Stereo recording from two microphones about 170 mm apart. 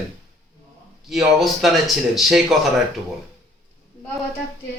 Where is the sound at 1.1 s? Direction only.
Centre (ahead or behind).